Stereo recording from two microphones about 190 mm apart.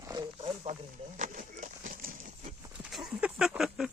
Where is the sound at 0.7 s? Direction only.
40° right (ahead or behind).